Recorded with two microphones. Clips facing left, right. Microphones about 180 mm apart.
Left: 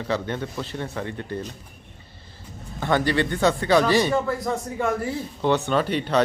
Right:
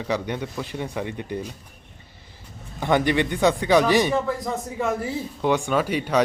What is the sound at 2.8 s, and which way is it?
A man's voice, 20° right (ahead or behind).